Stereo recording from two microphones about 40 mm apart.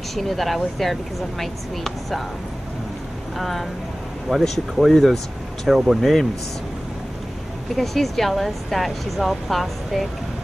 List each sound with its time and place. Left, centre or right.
0.1 s speech: centre
3.3 s speech: centre
5.9 s speech: centre
7.7 s speech: centre